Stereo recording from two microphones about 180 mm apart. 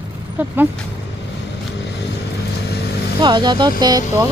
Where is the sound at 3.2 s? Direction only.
25° right (ahead or behind).